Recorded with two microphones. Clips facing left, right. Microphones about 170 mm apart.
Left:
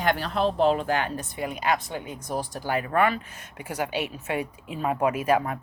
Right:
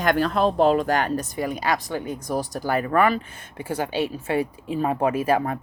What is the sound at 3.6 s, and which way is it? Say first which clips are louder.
A woman's voice: right 4 dB; 30° right (ahead or behind).